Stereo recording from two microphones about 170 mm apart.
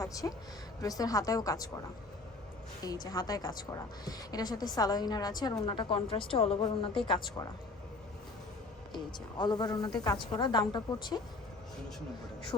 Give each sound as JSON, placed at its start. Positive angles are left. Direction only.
{"t": 0.0, "sound": "a woman's voice", "side_deg": 20}
{"t": 3.1, "sound": "a woman's voice", "side_deg": 20}
{"t": 8.9, "sound": "a woman's voice", "side_deg": 25}